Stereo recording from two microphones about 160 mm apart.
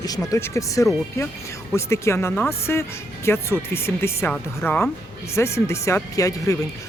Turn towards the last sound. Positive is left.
turn(degrees=20)  # may be behind; listen again after turning